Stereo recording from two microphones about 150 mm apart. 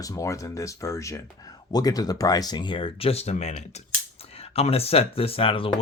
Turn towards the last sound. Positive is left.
turn(degrees=35)  # may be behind; listen again after turning